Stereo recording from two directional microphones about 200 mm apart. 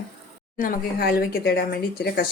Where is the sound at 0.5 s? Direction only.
45° left (ahead or behind).